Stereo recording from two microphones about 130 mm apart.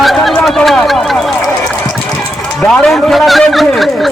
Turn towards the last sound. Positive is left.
turn(degrees=0)  # may be behind; listen again after turning